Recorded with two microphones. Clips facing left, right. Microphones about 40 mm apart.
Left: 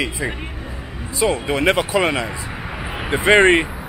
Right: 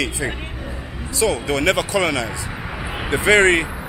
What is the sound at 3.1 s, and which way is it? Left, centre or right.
Speech, centre.